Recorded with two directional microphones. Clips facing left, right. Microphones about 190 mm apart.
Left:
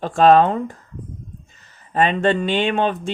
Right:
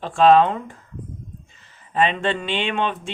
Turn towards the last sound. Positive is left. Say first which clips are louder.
# left 4 dB
turn(degrees=40)  # may be behind; listen again after turning